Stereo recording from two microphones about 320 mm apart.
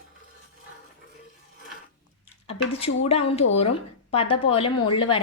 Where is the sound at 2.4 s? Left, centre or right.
Centre.